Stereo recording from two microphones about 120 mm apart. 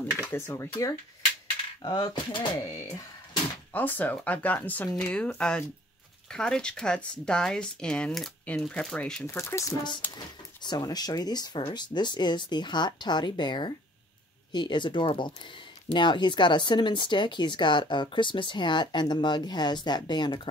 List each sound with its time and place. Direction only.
0.0 s speech: 15° left (ahead or behind)
1.8 s speech: 35° left (ahead or behind)
3.7 s speech: 15° left (ahead or behind)
9.2 s speech: 20° left (ahead or behind)
10.1 s speech: 35° left (ahead or behind)